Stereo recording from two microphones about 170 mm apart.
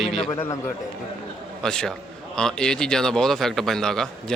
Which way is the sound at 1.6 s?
5° left (ahead or behind).